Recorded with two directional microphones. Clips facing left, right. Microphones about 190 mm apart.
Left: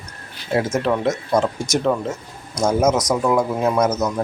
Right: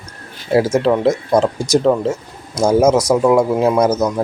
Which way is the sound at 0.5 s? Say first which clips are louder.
Right 6 dB; 30° right (ahead or behind).